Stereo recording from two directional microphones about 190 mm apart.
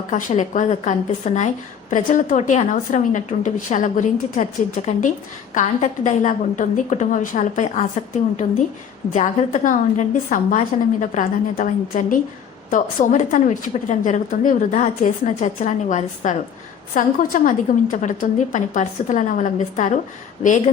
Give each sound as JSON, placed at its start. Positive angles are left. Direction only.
{"t": 0.1, "sound": "a woman's voice", "side_deg": 40}